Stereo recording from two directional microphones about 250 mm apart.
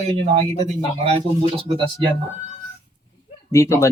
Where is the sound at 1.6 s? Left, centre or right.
Centre.